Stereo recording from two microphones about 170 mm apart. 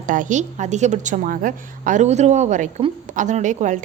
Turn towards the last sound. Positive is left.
turn(degrees=-45)  # may be behind; listen again after turning